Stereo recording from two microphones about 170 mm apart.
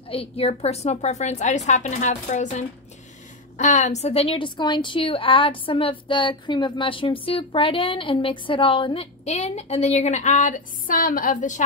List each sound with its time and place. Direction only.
0.1 s a woman's voice: 35° left (ahead or behind)